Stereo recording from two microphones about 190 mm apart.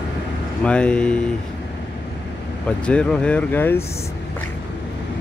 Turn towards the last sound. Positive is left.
turn(degrees=10)  # may be behind; listen again after turning